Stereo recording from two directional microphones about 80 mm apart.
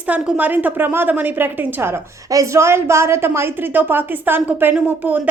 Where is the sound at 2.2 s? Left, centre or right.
Right.